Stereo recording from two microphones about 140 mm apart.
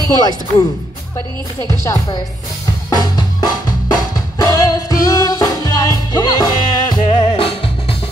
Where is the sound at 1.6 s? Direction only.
25° left (ahead or behind).